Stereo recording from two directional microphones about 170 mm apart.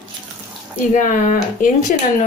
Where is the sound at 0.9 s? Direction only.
50° left (ahead or behind).